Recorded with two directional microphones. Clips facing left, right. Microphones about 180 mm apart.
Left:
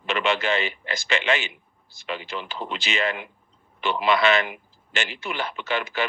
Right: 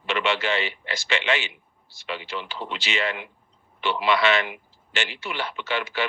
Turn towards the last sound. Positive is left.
turn(degrees=45)  # may be behind; listen again after turning